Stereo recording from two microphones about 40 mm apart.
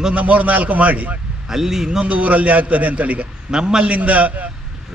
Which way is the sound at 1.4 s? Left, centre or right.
Centre.